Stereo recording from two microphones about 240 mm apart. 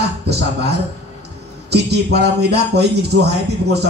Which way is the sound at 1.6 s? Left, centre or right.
Right.